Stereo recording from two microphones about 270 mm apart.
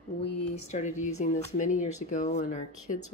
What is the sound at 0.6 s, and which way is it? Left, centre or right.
Speech, left.